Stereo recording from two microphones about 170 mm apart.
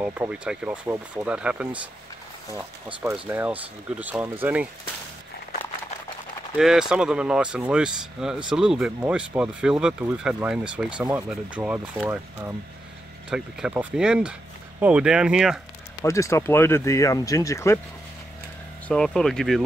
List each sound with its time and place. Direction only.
0.0 s speech: 10° right (ahead or behind)
3.0 s speech: 10° right (ahead or behind)
6.5 s speech: 5° right (ahead or behind)
16.0 s speech: 15° left (ahead or behind)
18.9 s speech: 5° left (ahead or behind)